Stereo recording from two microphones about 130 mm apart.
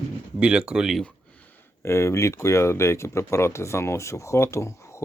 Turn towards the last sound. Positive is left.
turn(degrees=20)  # may be behind; listen again after turning